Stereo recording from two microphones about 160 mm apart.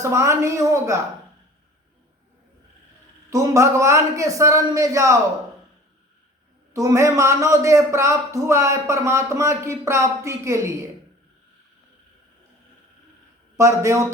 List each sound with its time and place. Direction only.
0.0 s speech: 20° right (ahead or behind)
3.2 s a man's voice: 20° right (ahead or behind)
6.7 s a man's voice: 20° right (ahead or behind)
13.6 s speech: 20° right (ahead or behind)